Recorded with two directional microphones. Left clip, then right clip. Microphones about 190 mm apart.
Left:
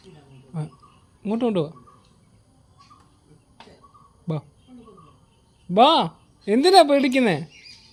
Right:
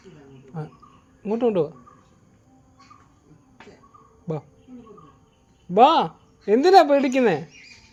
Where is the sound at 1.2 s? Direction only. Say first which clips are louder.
Right 2 dB; 40° left (ahead or behind).